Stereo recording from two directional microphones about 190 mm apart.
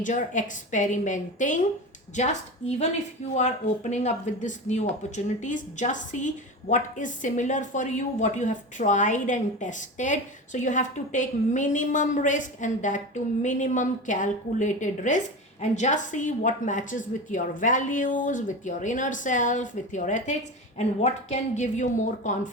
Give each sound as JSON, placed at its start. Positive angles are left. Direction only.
{"t": 0.0, "sound": "a woman's voice", "side_deg": 40}